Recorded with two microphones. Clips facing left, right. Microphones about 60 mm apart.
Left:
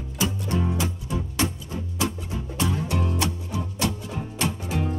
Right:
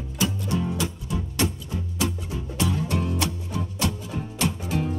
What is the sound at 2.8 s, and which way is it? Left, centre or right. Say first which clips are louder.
Music: even; left.